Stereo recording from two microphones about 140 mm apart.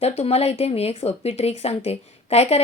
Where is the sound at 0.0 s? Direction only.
50° left (ahead or behind).